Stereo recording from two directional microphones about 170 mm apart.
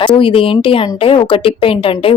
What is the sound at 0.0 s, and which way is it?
A woman's voice, 30° left (ahead or behind).